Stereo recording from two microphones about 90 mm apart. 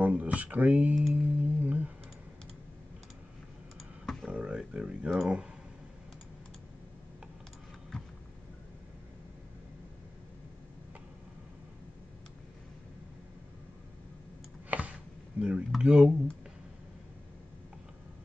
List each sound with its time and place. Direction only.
0.0 s speech: 15° right (ahead or behind)
1.1 s music: 15° right (ahead or behind)
4.0 s computer keyboard: 5° left (ahead or behind)
4.3 s a sound: 10° right (ahead or behind)
14.7 s a sound: 15° right (ahead or behind)
15.8 s speech: 10° right (ahead or behind)